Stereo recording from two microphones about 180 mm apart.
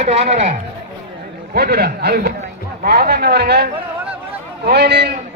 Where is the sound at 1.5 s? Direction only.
60° right (ahead or behind).